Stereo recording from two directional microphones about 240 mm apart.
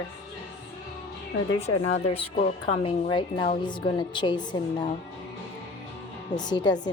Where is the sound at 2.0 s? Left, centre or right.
Left.